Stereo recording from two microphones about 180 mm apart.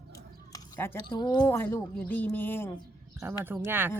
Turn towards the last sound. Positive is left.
turn(degrees=-10)  # may be behind; listen again after turning